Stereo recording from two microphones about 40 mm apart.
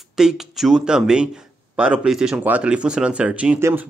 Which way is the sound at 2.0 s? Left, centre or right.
Centre.